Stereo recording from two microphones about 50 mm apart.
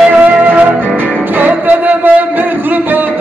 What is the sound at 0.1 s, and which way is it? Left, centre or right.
Music, right.